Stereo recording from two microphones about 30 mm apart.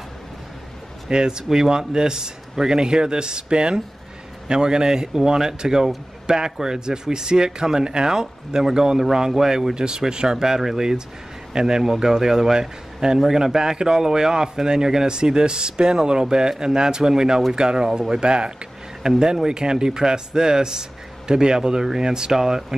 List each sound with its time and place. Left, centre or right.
1.1 s a man's voice: right
9.8 s a man's voice: right